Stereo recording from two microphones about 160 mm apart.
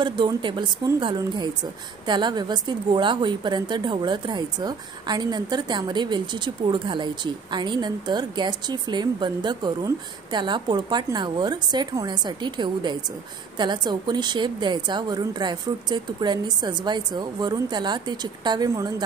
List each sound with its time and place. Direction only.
0.0 s speech: 30° right (ahead or behind)